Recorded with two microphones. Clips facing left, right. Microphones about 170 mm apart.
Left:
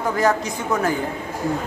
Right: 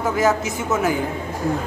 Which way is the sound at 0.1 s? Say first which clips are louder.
Even; 5° right (ahead or behind).